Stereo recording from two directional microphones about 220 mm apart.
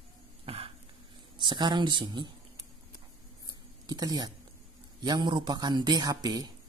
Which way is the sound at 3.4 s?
15° right (ahead or behind).